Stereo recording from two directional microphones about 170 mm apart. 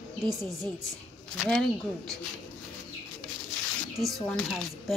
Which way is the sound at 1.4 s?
Centre (ahead or behind).